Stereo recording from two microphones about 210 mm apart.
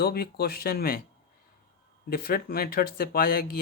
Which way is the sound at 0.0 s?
50° left (ahead or behind).